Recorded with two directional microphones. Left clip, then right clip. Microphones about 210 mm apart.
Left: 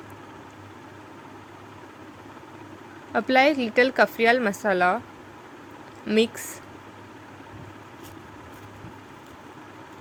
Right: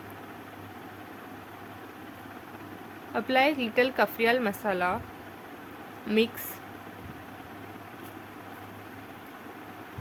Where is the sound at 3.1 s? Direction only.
20° left (ahead or behind).